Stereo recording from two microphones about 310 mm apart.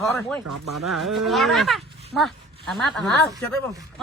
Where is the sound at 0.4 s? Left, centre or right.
Right.